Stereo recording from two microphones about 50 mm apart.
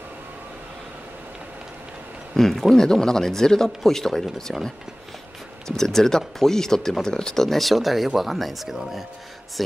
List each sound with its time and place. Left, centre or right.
2.3 s speech: centre
5.7 s speech: centre